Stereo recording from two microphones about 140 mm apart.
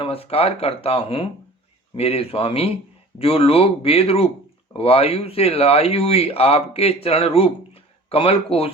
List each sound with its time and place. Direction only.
0.0 s speech: 45° left (ahead or behind)